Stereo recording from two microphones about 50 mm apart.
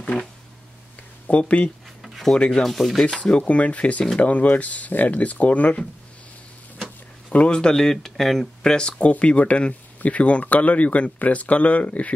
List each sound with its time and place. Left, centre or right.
0.0 s a sound: left
1.2 s speech: left
2.0 s a sound: centre
2.3 s speech: left
2.6 s rub: centre
3.2 s speech: left
7.3 s speech: left
7.7 s speech: centre
8.7 s speech: centre
9.1 s speech: left